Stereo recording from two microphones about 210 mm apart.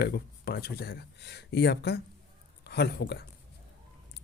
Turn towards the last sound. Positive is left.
turn(degrees=55)  # may be behind; listen again after turning